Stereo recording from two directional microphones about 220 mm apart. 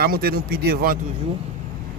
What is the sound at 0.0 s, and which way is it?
Speech, 45° right (ahead or behind).